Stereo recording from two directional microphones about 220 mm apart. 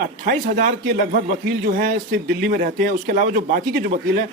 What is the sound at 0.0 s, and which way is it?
Speech, 40° right (ahead or behind).